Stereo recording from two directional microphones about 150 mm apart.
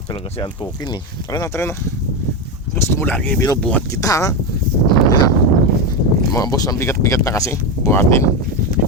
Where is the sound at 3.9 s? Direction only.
20° left (ahead or behind).